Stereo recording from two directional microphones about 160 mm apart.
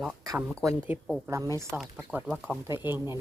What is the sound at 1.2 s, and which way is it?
Speech, 20° right (ahead or behind).